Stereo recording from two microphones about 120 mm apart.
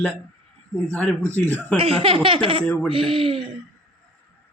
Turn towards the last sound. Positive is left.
turn(degrees=-50)  # may be behind; listen again after turning